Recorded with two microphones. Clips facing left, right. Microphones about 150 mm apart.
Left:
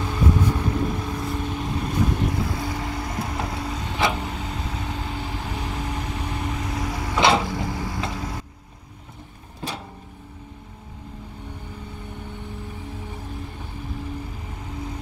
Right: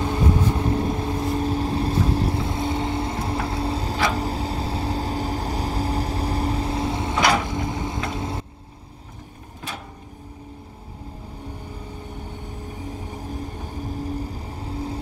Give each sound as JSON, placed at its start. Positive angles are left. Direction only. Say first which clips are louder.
{"t": 0.5, "sound": "vehicle", "louder": "right 2 dB", "side_deg": -30}
{"t": 7.2, "sound": "vehicle", "louder": "left 2 dB", "side_deg": 25}
{"t": 7.4, "sound": "vehicle", "louder": "right 1 dB", "side_deg": -20}
{"t": 13.3, "sound": "vehicle", "louder": "right 4 dB", "side_deg": -40}